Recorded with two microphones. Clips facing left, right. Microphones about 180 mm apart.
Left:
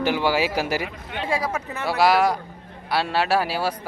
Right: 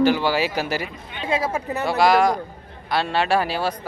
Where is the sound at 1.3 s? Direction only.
25° right (ahead or behind).